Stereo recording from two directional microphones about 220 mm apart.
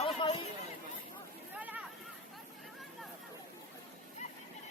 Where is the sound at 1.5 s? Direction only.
5° right (ahead or behind).